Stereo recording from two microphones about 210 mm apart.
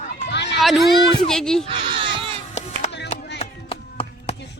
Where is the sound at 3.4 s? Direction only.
25° left (ahead or behind).